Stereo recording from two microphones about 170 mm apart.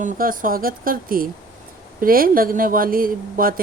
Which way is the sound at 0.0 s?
55° right (ahead or behind).